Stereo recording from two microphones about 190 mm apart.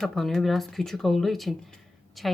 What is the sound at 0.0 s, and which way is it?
Speech, centre (ahead or behind).